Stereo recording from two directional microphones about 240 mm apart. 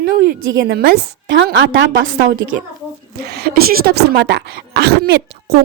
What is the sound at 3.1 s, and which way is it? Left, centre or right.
A woman's voice, right.